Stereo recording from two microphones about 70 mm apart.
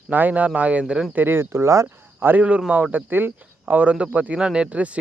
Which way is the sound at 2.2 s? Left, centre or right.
Right.